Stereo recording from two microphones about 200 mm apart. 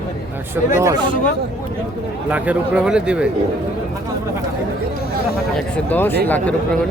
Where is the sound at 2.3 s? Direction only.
5° right (ahead or behind).